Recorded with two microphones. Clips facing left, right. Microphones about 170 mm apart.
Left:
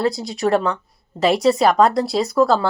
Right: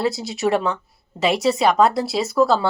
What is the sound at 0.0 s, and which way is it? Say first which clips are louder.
Speech: left 1 dB; centre (ahead or behind).